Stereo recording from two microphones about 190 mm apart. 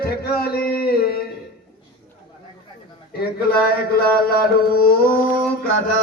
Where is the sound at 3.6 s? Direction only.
50° left (ahead or behind).